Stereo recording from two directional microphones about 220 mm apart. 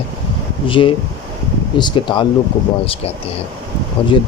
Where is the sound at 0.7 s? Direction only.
25° left (ahead or behind).